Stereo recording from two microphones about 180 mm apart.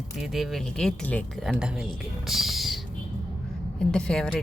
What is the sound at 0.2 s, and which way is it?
Speech, centre (ahead or behind).